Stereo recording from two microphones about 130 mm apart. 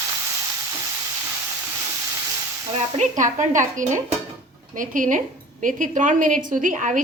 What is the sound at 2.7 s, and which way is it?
A woman's voice, 70° right (ahead or behind).